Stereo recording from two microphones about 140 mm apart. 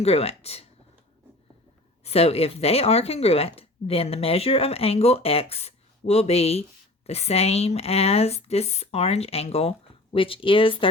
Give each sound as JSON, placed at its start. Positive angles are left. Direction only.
{"t": 0.0, "sound": "speech", "side_deg": 45}
{"t": 2.0, "sound": "speech", "side_deg": 45}